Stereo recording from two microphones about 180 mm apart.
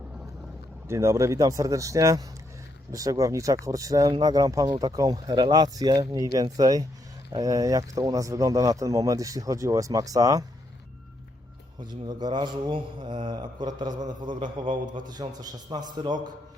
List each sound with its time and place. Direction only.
0.9 s speech: 15° right (ahead or behind)
11.8 s speech: 25° right (ahead or behind)